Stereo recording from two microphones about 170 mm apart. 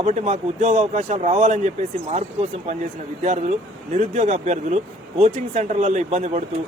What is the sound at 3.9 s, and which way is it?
Speech, 40° right (ahead or behind).